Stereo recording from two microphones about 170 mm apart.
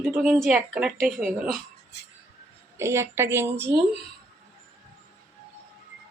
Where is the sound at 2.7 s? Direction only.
15° right (ahead or behind).